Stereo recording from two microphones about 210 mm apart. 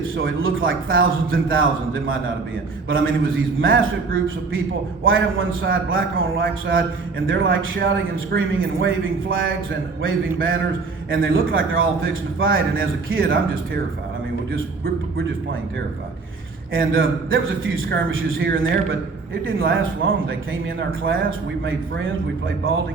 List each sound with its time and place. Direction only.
0.0 s a man's voice: 70° right (ahead or behind)
5.0 s a man's voice: 70° right (ahead or behind)
11.1 s a man's voice: 70° right (ahead or behind)
16.7 s a man's voice: 70° right (ahead or behind)